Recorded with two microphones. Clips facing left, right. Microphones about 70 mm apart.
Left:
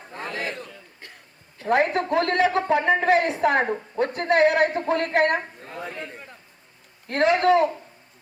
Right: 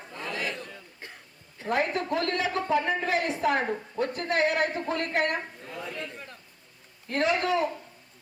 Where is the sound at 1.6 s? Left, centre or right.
Left.